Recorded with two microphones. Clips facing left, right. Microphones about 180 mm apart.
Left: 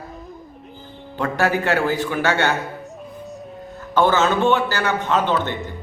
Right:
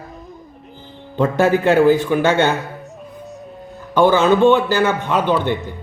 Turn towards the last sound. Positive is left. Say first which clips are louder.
# right 3 dB
turn(degrees=-15)  # may be behind; listen again after turning